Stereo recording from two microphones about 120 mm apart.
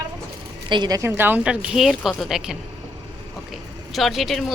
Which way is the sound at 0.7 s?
35° right (ahead or behind).